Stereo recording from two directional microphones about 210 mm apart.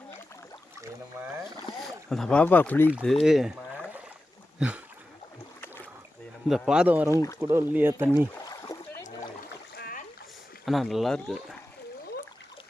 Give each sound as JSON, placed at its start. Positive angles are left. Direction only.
{"t": 1.7, "sound": "boat", "side_deg": 20}
{"t": 2.0, "sound": "speech", "side_deg": 5}
{"t": 3.2, "sound": "a sound", "side_deg": 0}
{"t": 5.5, "sound": "boat", "side_deg": 10}
{"t": 6.7, "sound": "speech", "side_deg": -5}
{"t": 7.1, "sound": "speech", "side_deg": 15}
{"t": 7.4, "sound": "speech", "side_deg": -10}
{"t": 8.4, "sound": "a sound", "side_deg": 15}
{"t": 9.7, "sound": "rowboat", "side_deg": 45}
{"t": 10.7, "sound": "speech", "side_deg": 0}